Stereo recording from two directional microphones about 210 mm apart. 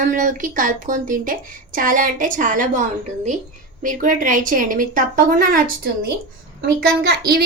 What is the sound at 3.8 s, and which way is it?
A woman's voice, 40° right (ahead or behind).